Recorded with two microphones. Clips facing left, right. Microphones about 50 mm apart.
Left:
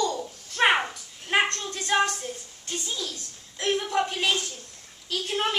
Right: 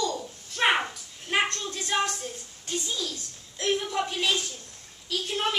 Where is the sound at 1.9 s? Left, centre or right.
Centre.